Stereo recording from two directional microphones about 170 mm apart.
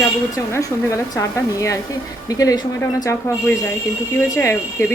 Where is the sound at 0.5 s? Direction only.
20° left (ahead or behind).